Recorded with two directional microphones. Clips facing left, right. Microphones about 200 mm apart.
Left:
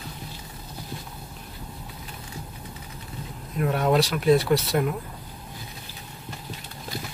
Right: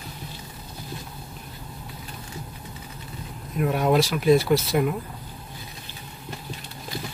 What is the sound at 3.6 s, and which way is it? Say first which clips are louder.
Speech: right 1 dB; 5° right (ahead or behind).